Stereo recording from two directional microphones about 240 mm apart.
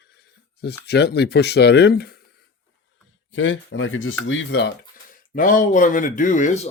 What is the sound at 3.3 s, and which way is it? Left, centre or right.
Speech, left.